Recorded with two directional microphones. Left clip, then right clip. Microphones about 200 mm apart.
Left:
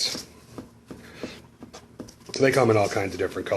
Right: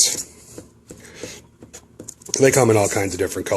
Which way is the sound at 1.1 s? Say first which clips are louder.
Right 3 dB; 50° right (ahead or behind).